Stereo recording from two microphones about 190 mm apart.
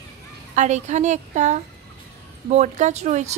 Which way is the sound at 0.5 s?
40° right (ahead or behind).